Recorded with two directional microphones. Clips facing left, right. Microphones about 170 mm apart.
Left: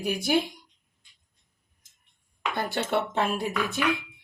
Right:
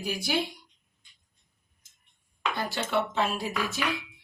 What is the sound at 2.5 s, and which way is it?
Speech, 55° left (ahead or behind).